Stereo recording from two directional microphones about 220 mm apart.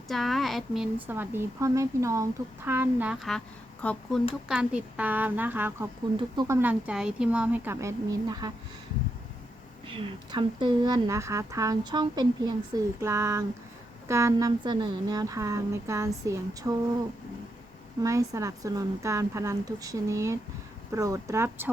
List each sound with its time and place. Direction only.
0.1 s speech: centre (ahead or behind); by 6.6 s 20° right (ahead or behind)
6.6 s speech: 5° right (ahead or behind)
9.8 s speech: 25° right (ahead or behind)
18.0 s speech: 15° right (ahead or behind)